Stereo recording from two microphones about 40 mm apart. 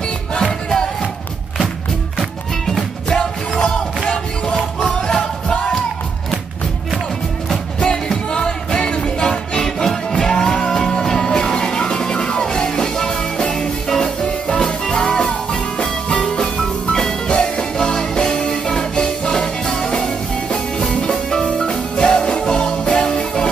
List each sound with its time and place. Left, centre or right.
0.4 s music: centre
2.1 s music: centre
3.1 s music: centre
4.8 s music: centre
7.8 s music: centre
17.3 s music: centre